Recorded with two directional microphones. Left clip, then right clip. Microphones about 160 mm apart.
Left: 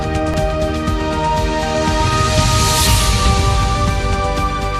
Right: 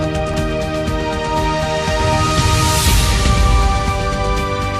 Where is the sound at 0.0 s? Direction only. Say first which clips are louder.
Left 1 dB; centre (ahead or behind).